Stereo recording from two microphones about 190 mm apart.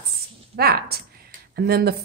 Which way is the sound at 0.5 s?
55° right (ahead or behind).